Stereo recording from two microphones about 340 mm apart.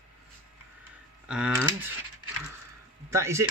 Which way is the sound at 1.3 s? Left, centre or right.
Centre.